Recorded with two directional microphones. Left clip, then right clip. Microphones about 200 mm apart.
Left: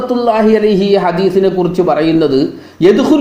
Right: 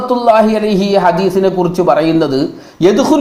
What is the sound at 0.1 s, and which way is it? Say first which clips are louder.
A man's voice: right 2 dB; 20° right (ahead or behind).